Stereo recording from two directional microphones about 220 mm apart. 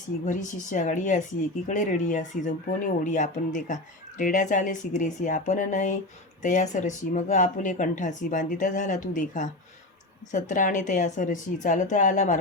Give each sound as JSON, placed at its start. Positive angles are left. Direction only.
{"t": 0.3, "sound": "speech", "side_deg": 35}